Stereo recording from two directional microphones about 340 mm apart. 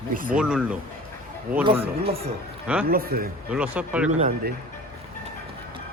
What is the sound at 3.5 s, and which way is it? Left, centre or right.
Speech, centre.